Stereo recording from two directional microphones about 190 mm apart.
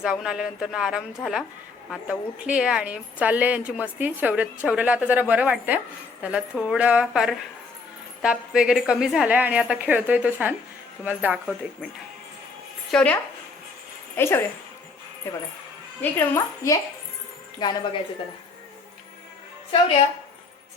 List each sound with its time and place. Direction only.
0.0 s a woman's voice: 5° right (ahead or behind)
12.9 s speech: 5° left (ahead or behind)
14.2 s a woman's voice: 10° left (ahead or behind)